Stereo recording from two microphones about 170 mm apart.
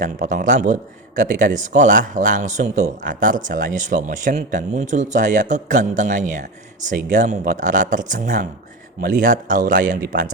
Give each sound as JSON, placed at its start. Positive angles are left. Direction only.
{"t": 0.0, "sound": "a man's voice", "side_deg": -50}